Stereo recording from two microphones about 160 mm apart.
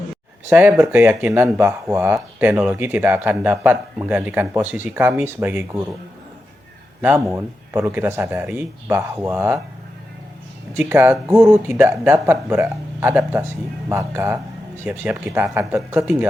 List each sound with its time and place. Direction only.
0.5 s speech: 10° right (ahead or behind)
7.0 s speech: 10° right (ahead or behind)
10.8 s speech: 15° right (ahead or behind)